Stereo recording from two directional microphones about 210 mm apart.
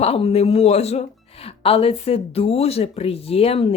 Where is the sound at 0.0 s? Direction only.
30° left (ahead or behind).